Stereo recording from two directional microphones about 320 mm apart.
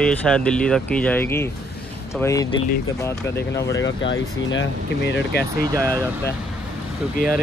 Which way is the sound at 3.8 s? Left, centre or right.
Left.